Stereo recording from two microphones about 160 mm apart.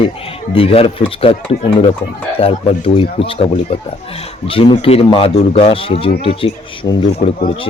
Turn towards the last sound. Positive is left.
turn(degrees=30)  # may be behind; listen again after turning